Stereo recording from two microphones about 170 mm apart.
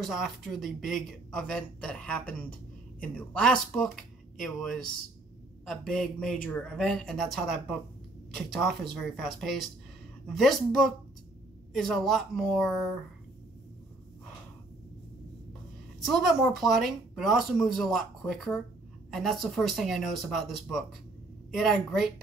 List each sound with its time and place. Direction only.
0.0 s speech: centre (ahead or behind)
16.1 s speech: centre (ahead or behind)